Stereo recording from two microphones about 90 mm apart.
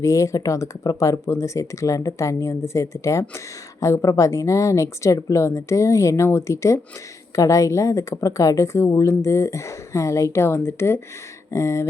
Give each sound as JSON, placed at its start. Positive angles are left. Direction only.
{"t": 0.0, "sound": "speech", "side_deg": 35}